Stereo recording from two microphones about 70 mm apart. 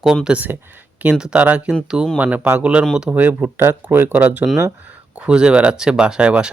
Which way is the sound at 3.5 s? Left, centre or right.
Right.